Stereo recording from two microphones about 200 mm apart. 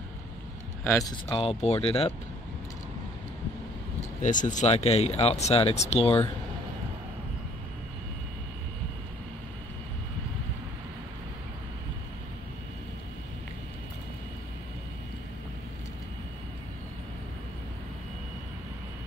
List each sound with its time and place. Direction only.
0.8 s speech: 15° left (ahead or behind)
1.4 s speech: 30° left (ahead or behind)
4.2 s speech: 40° left (ahead or behind)